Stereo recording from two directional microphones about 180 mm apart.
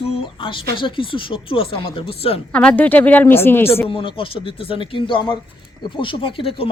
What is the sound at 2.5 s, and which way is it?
A woman's voice, 5° left (ahead or behind).